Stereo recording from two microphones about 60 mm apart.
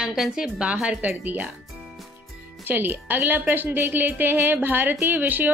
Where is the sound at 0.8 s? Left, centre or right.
Right.